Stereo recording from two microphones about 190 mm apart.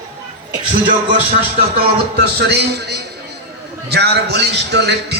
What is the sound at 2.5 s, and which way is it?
A man's voice, 60° right (ahead or behind).